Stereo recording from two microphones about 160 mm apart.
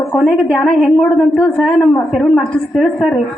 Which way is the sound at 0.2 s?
5° left (ahead or behind).